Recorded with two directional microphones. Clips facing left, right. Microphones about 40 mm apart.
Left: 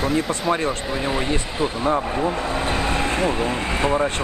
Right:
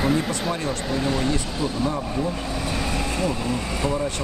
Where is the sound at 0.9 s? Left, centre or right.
Left.